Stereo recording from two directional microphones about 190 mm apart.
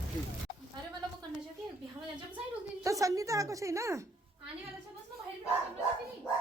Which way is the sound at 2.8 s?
15° right (ahead or behind).